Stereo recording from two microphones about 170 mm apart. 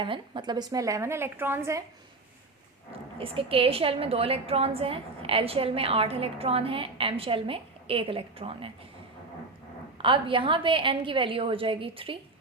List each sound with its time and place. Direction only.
0.0 s a woman's voice: 30° right (ahead or behind)
3.2 s a woman's voice: 35° right (ahead or behind)
10.0 s a woman's voice: 30° right (ahead or behind)